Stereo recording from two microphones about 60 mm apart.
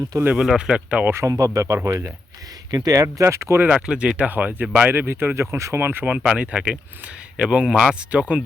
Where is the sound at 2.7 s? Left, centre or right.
Right.